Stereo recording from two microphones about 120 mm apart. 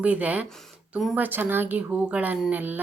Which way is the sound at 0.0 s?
10° right (ahead or behind).